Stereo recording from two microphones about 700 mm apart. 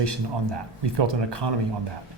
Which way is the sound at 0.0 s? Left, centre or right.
Right.